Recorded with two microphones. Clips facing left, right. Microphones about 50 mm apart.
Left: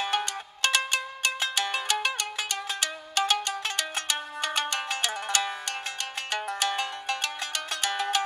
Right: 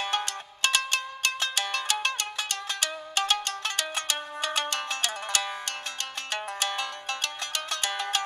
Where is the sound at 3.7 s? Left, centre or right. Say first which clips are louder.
Even; centre.